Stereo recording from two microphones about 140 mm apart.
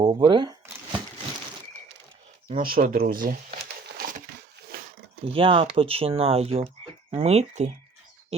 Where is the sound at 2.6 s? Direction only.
90° right.